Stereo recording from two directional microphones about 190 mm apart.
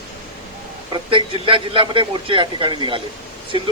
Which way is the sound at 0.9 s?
25° right (ahead or behind).